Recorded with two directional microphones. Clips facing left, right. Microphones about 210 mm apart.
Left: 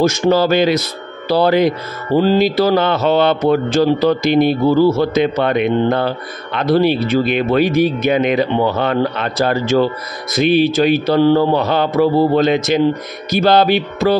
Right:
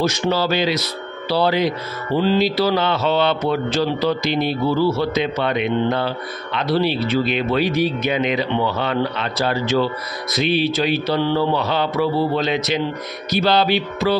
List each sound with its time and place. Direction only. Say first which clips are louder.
0.0 s speech: left 6 dB; 45° left (ahead or behind)